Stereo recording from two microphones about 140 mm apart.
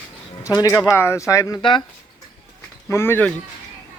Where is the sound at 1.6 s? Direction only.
35° left (ahead or behind).